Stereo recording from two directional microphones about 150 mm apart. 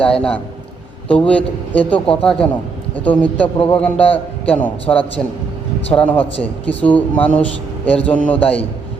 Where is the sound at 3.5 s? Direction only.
35° left (ahead or behind).